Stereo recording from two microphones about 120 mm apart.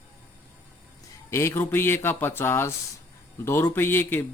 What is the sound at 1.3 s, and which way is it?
Speech, 20° left (ahead or behind).